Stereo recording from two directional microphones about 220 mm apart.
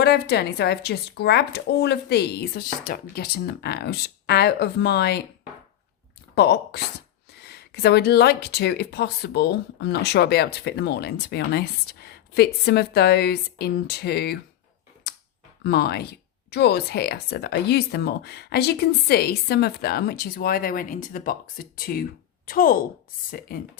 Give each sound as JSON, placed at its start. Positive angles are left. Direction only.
{"t": 0.0, "sound": "speech", "side_deg": 50}
{"t": 6.3, "sound": "speech", "side_deg": 45}
{"t": 15.6, "sound": "a woman's voice", "side_deg": 45}